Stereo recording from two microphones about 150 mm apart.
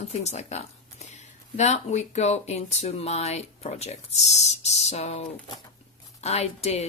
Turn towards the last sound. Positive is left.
turn(degrees=45)  # may be behind; listen again after turning